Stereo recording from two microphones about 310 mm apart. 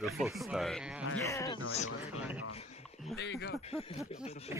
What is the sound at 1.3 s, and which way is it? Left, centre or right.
Speech, centre.